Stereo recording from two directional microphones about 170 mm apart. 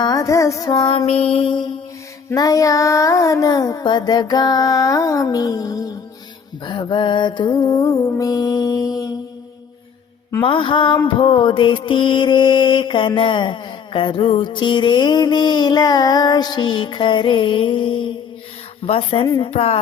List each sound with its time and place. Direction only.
0.0 s mantra: 20° left (ahead or behind)
10.4 s mantra: 30° left (ahead or behind)
18.9 s a woman's voice: 35° left (ahead or behind)